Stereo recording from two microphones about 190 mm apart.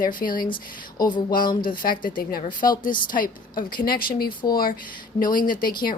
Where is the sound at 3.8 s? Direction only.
55° left (ahead or behind).